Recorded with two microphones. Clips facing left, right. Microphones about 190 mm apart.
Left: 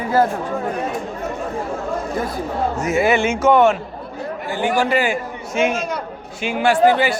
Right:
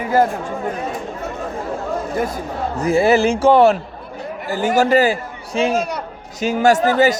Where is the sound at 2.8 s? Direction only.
35° right (ahead or behind).